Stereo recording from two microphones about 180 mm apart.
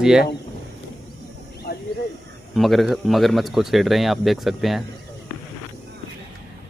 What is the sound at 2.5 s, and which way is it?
A man's voice, centre (ahead or behind).